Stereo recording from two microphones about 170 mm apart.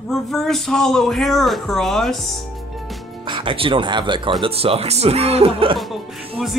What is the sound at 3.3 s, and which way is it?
Speech, 30° right (ahead or behind).